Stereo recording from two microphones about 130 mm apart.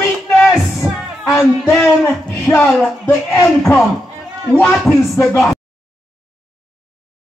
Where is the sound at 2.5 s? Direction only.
20° left (ahead or behind).